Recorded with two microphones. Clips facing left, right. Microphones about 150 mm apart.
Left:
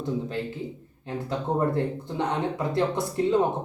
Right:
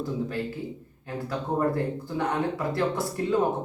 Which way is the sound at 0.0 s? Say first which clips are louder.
Even; 25° left (ahead or behind).